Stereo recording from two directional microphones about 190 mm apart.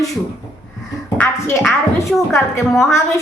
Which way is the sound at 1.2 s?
10° left (ahead or behind).